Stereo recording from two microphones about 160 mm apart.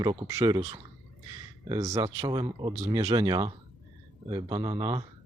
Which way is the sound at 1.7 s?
20° right (ahead or behind).